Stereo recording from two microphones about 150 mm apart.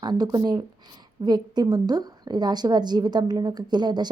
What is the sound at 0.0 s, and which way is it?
A woman's voice, 25° right (ahead or behind).